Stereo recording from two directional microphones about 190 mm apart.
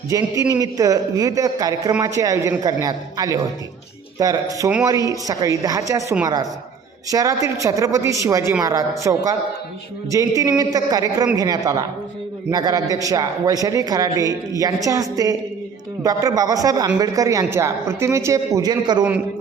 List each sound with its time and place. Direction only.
0.1 s a woman's voice: 20° right (ahead or behind)